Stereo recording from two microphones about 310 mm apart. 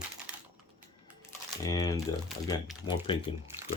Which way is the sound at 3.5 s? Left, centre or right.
Centre.